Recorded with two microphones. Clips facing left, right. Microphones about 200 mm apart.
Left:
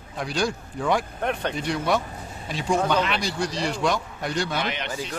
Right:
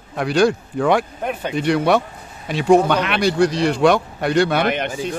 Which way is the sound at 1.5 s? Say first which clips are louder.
Right 8 dB; 65° right (ahead or behind).